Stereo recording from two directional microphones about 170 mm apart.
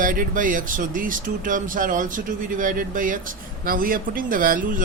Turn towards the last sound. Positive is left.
turn(degrees=-55)  # may be behind; listen again after turning